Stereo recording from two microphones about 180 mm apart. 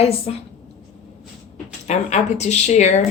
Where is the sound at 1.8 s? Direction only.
40° left (ahead or behind).